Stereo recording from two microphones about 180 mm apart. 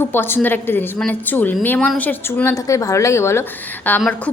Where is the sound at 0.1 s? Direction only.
10° left (ahead or behind).